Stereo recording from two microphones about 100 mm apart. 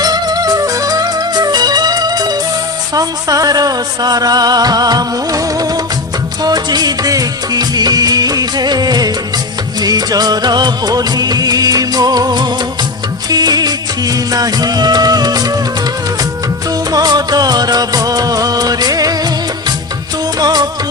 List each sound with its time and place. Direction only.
0.0 s music: 40° right (ahead or behind)
9.8 s music of bollywood: 40° right (ahead or behind)
13.3 s music: 40° right (ahead or behind)
16.9 s music of bollywood: 40° right (ahead or behind)
20.4 s music: 40° right (ahead or behind)